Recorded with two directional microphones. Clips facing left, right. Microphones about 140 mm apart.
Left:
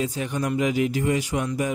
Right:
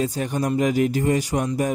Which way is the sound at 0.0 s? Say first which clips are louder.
Right 3 dB; 40° right (ahead or behind).